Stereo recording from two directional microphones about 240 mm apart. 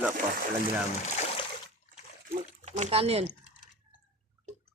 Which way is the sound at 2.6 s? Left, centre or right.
Right.